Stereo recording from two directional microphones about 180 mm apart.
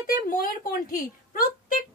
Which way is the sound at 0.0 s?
55° left (ahead or behind).